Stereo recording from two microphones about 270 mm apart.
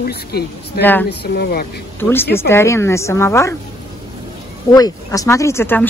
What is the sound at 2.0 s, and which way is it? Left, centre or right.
Speech, centre.